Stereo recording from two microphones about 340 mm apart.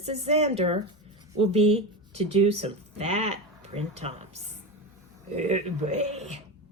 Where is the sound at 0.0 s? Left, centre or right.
Centre.